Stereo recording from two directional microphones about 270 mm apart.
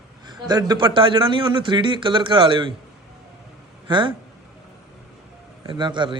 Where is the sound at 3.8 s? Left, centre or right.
Centre.